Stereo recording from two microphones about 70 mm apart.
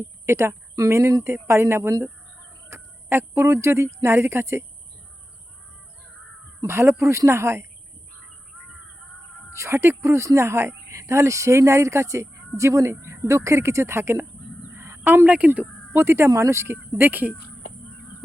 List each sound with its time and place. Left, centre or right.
0.0 s speech: right
6.7 s speech: right
9.6 s speech: right
14.9 s speech: right
15.9 s speech: right